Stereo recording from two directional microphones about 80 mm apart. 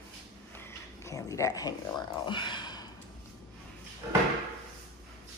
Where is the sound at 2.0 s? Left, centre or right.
Left.